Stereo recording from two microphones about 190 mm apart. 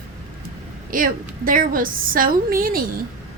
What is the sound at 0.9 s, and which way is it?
A woman's voice, 45° right (ahead or behind).